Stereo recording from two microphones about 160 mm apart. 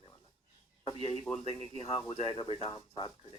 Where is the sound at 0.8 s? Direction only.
35° left (ahead or behind).